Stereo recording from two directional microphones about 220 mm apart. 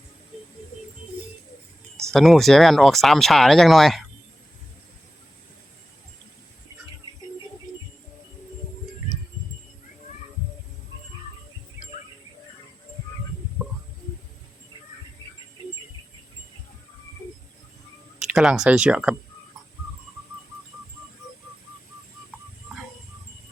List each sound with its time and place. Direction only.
2.1 s speech: centre (ahead or behind)
13.6 s stomach rumble: 5° right (ahead or behind)
18.2 s speech: 5° right (ahead or behind)